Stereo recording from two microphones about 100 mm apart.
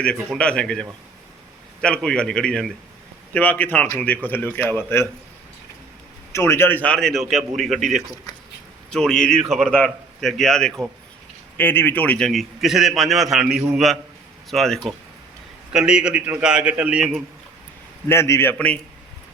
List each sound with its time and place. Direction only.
0.3 s a man's voice: 10° left (ahead or behind)
3.3 s a man's voice: 15° left (ahead or behind)
6.3 s a man's voice: 25° left (ahead or behind); by 10.8 s 5° left (ahead or behind)
11.5 s a man's voice: 20° left (ahead or behind); by 14.8 s 5° left (ahead or behind)
15.7 s a man's voice: 10° right (ahead or behind)
18.1 s speech: 25° left (ahead or behind)
18.5 s a man's voice: 10° left (ahead or behind)